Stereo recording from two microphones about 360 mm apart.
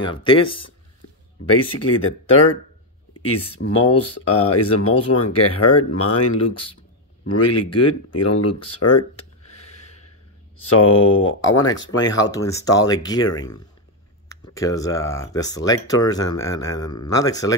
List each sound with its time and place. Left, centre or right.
0.0 s speech: centre
1.5 s speech: left
3.6 s speech: left
4.0 s speech: left
10.7 s speech: left
11.9 s speech: centre
13.3 s speech: left
14.5 s speech: centre